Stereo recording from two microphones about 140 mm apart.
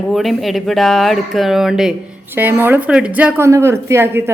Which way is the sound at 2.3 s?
15° right (ahead or behind).